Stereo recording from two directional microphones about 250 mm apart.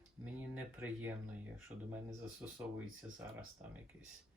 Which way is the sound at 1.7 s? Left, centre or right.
Right.